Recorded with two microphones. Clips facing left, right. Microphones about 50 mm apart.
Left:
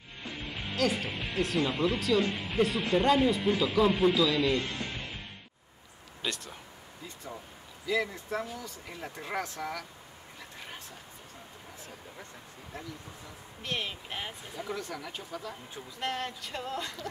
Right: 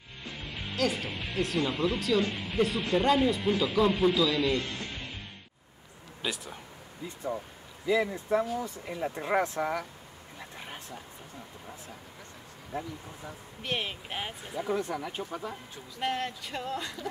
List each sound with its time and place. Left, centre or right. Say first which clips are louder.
0.2 s speech: left 1 dB; centre
6.2 s speech: right 1 dB; centre
7.8 s speech: right 3 dB; right
13.6 s speech: right 2 dB; centre
16.0 s speech: right 3 dB; centre